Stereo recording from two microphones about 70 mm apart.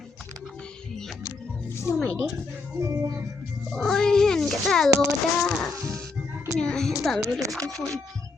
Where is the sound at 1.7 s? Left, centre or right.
Left.